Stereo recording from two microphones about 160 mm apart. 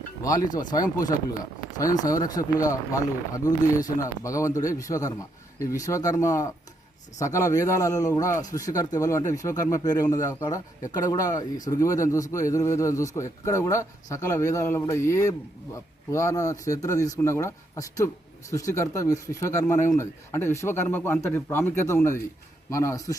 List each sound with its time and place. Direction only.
0.2 s a man's voice: 20° left (ahead or behind)